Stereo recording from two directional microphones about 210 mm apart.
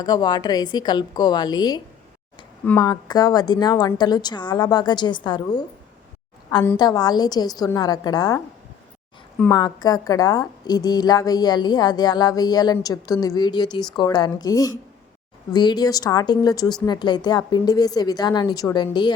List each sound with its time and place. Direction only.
0.0 s a woman's voice: 20° left (ahead or behind)
9.4 s a woman's voice: 20° left (ahead or behind)